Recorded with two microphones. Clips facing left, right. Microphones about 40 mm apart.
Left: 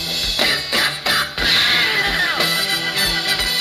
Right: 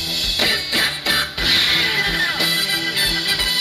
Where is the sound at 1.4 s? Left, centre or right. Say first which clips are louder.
Left 2 dB; centre.